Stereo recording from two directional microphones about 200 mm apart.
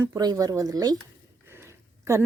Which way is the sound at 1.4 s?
15° right (ahead or behind).